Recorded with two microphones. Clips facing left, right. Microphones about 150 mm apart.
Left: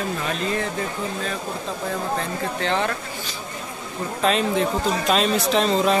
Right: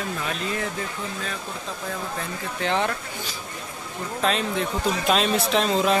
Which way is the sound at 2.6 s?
15° right (ahead or behind).